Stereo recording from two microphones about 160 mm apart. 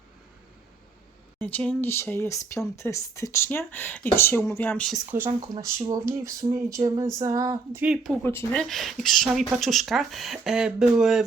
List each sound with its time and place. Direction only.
1.4 s speech: 10° left (ahead or behind)
5.1 s speech: 15° right (ahead or behind)
7.8 s speech: 5° right (ahead or behind)
8.2 s speech: 15° left (ahead or behind)
8.5 s speech: centre (ahead or behind)